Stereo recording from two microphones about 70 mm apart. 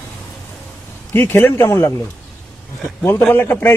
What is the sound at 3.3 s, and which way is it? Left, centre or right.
Speech, left.